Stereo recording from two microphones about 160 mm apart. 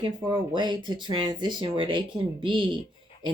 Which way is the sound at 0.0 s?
30° right (ahead or behind).